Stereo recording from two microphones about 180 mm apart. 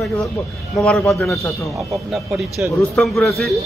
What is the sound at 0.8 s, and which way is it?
A man's voice, 5° left (ahead or behind).